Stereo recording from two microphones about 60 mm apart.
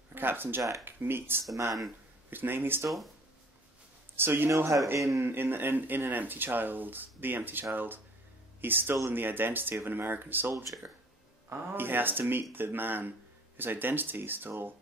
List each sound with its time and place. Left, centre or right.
0.1 s speech: right
0.6 s speech: right
0.8 s speech: right
4.2 s speech: right
4.9 s speech: right
5.2 s speech: right
11.5 s speech: right